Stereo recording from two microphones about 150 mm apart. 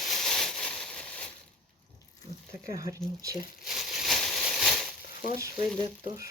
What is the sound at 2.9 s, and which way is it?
Speech, 20° right (ahead or behind).